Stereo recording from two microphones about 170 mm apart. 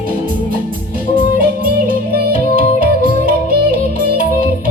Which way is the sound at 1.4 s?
60° right (ahead or behind).